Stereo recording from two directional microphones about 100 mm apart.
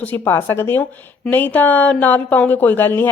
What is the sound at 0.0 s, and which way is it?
A woman's voice, 20° left (ahead or behind).